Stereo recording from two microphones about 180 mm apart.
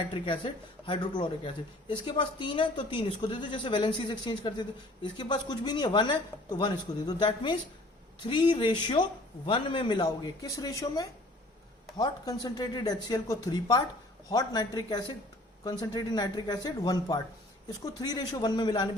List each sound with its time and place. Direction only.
0.1 s speech: 25° left (ahead or behind)